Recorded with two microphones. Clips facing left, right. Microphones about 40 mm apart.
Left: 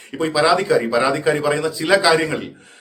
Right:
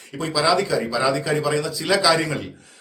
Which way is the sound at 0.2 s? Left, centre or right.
Left.